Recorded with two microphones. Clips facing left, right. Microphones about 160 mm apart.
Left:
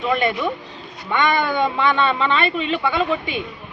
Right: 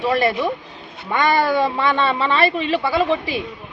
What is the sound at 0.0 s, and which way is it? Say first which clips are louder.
A woman's voice: right 2 dB; 35° right (ahead or behind).